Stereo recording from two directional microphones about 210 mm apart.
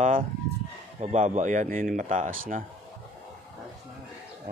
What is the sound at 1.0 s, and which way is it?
A man's voice, 35° right (ahead or behind).